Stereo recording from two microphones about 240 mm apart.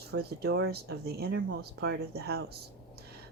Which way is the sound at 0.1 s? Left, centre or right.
Right.